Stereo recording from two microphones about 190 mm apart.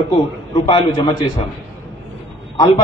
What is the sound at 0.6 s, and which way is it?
Speech, 25° left (ahead or behind).